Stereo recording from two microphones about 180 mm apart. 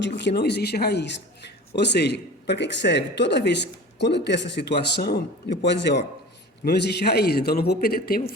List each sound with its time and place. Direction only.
0.0 s a man's voice: 75° left (ahead or behind); by 8.2 s 55° left (ahead or behind)